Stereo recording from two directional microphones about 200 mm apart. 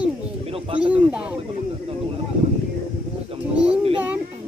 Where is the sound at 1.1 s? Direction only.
5° right (ahead or behind).